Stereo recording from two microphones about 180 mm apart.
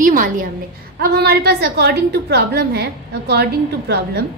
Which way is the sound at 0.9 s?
65° right (ahead or behind).